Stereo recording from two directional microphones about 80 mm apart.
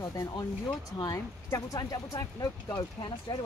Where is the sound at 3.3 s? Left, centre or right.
Left.